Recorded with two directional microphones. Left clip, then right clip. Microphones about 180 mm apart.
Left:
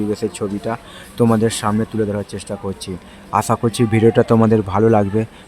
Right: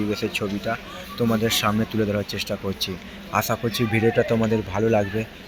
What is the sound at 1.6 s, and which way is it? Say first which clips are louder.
Speech: left 3 dB; 15° left (ahead or behind).